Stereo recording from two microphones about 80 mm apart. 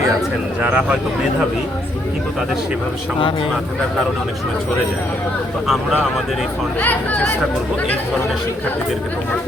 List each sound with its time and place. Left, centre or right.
0.6 s speech: centre
5.6 s speech: centre
6.7 s speech: left